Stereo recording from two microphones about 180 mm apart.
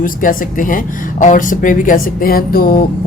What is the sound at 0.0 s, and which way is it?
Speech, 50° left (ahead or behind).